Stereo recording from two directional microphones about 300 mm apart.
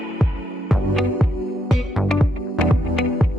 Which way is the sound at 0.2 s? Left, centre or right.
Centre.